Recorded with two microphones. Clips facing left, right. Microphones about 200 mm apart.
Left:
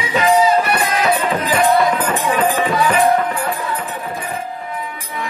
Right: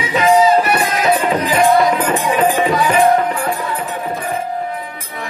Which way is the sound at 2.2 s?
20° right (ahead or behind).